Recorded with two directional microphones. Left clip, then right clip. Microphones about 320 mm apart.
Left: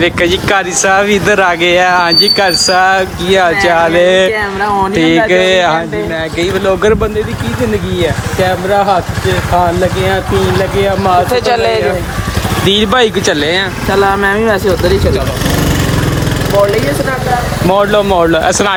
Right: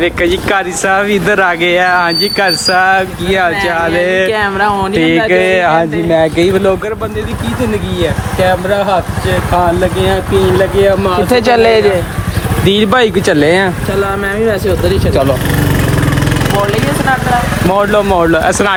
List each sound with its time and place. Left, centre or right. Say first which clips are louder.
0.0 s speech: left 1 dB; centre
8.0 s speech: right 2 dB; centre
11.3 s a man's voice: right 3 dB; right
12.6 s speech: even; centre
14.3 s speech: left 2 dB; centre
17.7 s speech: left 2 dB; centre